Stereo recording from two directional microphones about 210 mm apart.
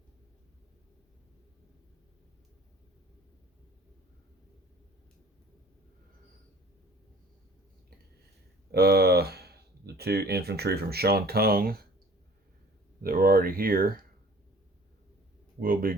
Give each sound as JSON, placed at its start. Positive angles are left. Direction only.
{"t": 8.7, "sound": "speech", "side_deg": -50}
{"t": 13.0, "sound": "speech", "side_deg": -45}
{"t": 15.6, "sound": "speech", "side_deg": -45}